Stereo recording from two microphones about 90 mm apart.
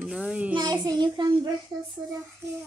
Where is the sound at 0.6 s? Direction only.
50° right (ahead or behind).